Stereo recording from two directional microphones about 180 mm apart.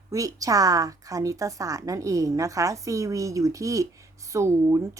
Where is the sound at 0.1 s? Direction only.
20° right (ahead or behind).